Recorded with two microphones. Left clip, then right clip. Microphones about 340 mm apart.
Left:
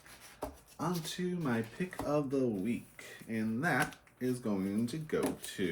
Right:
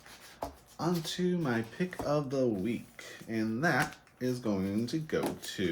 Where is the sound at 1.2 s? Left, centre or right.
Centre.